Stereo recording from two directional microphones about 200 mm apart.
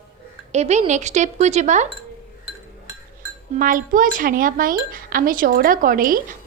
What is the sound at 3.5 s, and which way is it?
Speech, 45° right (ahead or behind).